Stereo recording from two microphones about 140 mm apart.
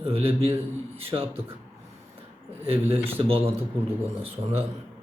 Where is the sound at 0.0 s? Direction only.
45° right (ahead or behind).